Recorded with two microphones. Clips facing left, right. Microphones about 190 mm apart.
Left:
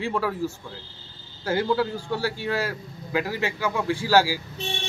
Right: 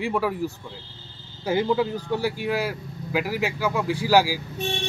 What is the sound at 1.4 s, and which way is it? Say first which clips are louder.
Speech: right 1 dB; 15° right (ahead or behind).